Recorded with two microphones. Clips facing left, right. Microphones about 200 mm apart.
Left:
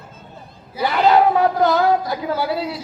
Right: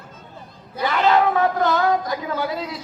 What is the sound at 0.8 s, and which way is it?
A man's voice, 35° left (ahead or behind).